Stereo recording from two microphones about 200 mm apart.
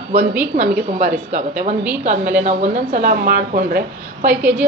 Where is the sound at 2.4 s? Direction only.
35° right (ahead or behind).